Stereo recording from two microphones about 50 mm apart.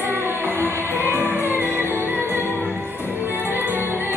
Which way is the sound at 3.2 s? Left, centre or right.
Right.